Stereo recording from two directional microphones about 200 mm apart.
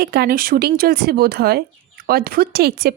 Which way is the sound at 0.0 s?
50° right (ahead or behind).